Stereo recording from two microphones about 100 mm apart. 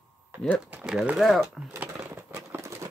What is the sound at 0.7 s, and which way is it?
Speech, 10° right (ahead or behind).